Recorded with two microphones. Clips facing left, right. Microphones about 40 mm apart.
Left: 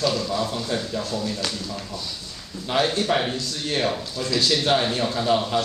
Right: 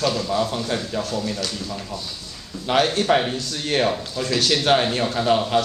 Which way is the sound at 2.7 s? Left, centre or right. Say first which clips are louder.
Right 4 dB; right.